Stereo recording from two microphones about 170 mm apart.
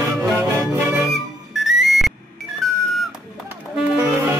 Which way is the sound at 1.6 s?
Centre (ahead or behind).